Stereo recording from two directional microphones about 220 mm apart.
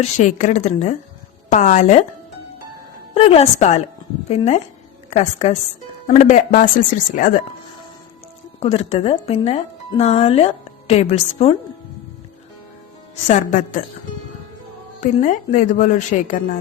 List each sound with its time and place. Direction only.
0.0 s a woman's voice: 35° left (ahead or behind)
3.2 s a woman's voice: 30° left (ahead or behind)
8.6 s speech: 30° left (ahead or behind)
13.2 s a woman's voice: 35° left (ahead or behind)
15.0 s a woman's voice: 35° left (ahead or behind)